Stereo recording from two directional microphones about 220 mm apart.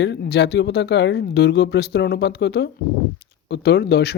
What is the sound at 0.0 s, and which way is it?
Speech, 50° left (ahead or behind).